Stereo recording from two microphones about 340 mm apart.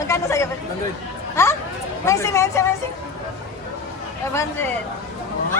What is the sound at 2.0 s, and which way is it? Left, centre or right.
Speech, centre.